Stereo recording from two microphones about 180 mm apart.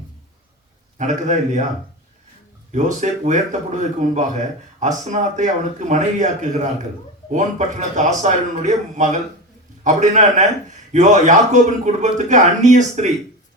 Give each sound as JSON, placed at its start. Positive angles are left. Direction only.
{"t": 0.9, "sound": "speech", "side_deg": -40}
{"t": 2.7, "sound": "speech", "side_deg": -40}